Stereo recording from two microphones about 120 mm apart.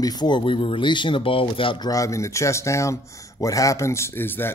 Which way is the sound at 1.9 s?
25° left (ahead or behind).